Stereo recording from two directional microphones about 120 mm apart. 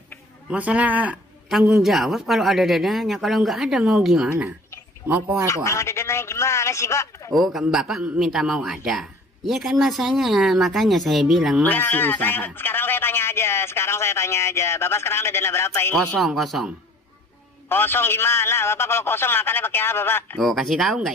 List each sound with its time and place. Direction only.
0.5 s a man's voice: 10° right (ahead or behind)
4.3 s speech: 20° right (ahead or behind)
5.5 s a man's voice: 25° left (ahead or behind)
7.3 s a man's voice: centre (ahead or behind)
11.6 s a man's voice: 15° left (ahead or behind)
16.2 s a man's voice: centre (ahead or behind)
17.6 s a man's voice: 20° left (ahead or behind)
20.3 s a man's voice: centre (ahead or behind)